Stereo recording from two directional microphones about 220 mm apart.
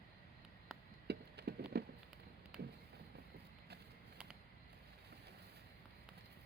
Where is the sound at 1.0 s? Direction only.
50° right (ahead or behind).